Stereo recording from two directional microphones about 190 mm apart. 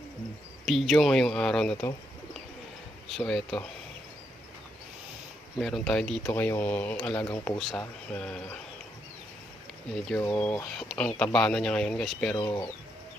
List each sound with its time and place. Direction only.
0.6 s speech: centre (ahead or behind)
3.2 s speech: centre (ahead or behind)
5.5 s speech: centre (ahead or behind)
7.3 s speech: 20° left (ahead or behind)
7.6 s speech: 5° left (ahead or behind)
10.2 s speech: 10° left (ahead or behind)
12.4 s speech: 20° left (ahead or behind)